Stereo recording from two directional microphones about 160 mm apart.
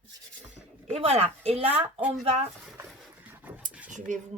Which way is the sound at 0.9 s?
40° right (ahead or behind).